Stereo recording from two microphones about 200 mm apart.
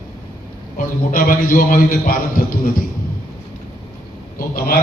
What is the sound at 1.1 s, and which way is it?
A man's voice, 45° left (ahead or behind).